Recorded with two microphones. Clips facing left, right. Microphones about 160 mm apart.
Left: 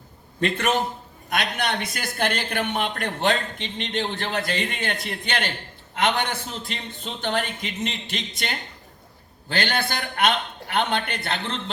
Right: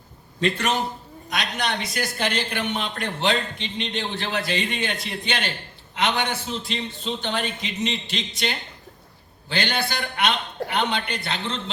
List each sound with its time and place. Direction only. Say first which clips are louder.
0.3 s a man's voice: left 1 dB; 55° left (ahead or behind)